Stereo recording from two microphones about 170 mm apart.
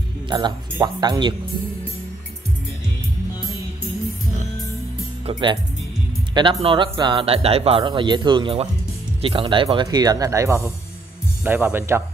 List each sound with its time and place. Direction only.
0.7 s speech: 20° right (ahead or behind)
5.2 s speech: 25° right (ahead or behind)